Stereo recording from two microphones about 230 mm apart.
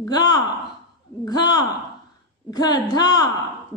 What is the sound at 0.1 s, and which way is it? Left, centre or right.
A woman's voice, centre.